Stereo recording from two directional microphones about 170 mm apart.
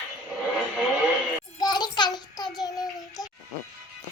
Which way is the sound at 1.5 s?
25° left (ahead or behind).